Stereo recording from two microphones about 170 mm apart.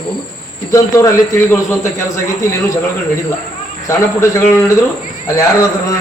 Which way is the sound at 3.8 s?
15° left (ahead or behind).